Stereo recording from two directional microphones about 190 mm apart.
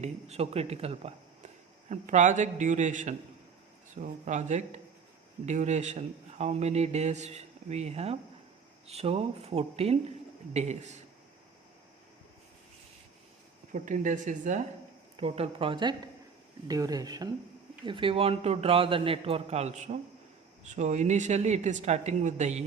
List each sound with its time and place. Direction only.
0.0 s a man's voice: 35° right (ahead or behind)
13.7 s a man's voice: 40° right (ahead or behind)
15.1 s a man's voice: 30° right (ahead or behind)